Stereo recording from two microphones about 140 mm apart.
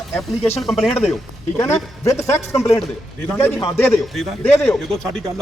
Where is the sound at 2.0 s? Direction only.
20° left (ahead or behind).